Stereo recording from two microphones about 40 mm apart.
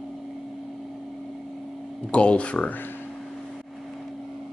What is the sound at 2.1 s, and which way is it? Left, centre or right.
Speech, left.